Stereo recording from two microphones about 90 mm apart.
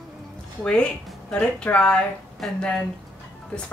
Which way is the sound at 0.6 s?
10° left (ahead or behind).